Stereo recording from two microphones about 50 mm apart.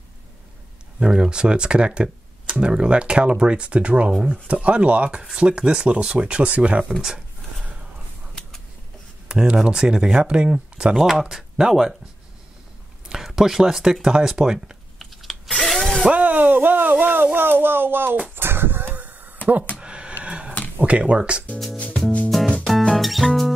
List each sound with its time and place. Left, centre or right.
0.9 s speech: centre
9.3 s speech: centre
11.0 s speech: centre
13.1 s speech: centre
15.0 s typing: centre
15.6 s spray: centre
16.1 s a sound: right
16.9 s speech: right
18.3 s a sound: right
19.8 s a sound: right
20.8 s speech: right
22.3 s music: centre